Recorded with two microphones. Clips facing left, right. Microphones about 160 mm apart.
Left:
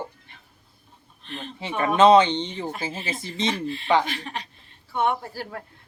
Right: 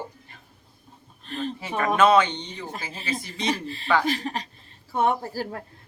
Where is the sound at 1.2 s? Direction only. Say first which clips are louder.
Right 6 dB; 40° right (ahead or behind).